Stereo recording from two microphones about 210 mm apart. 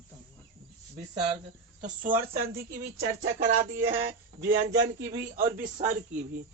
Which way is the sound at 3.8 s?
45° right (ahead or behind).